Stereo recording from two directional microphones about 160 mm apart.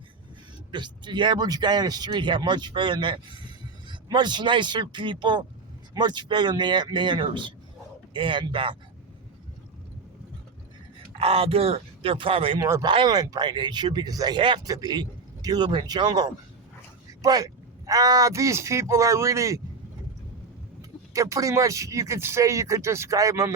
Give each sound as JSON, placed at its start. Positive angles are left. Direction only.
{"t": 0.7, "sound": "speech", "side_deg": -30}
{"t": 11.2, "sound": "speech", "side_deg": -40}
{"t": 12.5, "sound": "speech", "side_deg": -20}
{"t": 21.1, "sound": "speech", "side_deg": -20}